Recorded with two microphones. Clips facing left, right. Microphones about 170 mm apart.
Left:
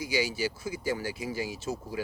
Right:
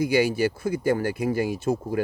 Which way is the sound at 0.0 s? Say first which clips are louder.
Right 9 dB; 55° right (ahead or behind).